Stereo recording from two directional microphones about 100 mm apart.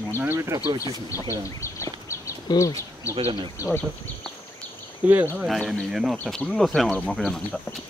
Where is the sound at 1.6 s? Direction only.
30° left (ahead or behind).